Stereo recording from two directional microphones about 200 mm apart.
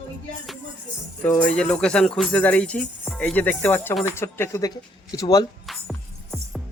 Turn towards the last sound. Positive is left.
turn(degrees=0)  # may be behind; listen again after turning